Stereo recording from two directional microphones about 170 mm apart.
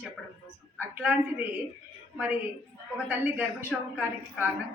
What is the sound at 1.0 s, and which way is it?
A woman's voice, 10° right (ahead or behind).